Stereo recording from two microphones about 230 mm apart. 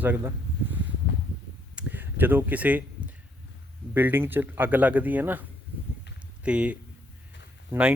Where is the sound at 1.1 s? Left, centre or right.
Left.